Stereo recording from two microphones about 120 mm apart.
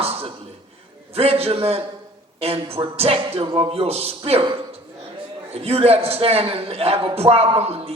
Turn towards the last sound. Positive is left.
turn(degrees=-55)  # may be behind; listen again after turning